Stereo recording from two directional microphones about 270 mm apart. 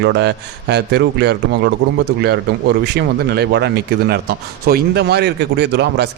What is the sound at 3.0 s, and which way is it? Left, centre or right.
A man's voice, right.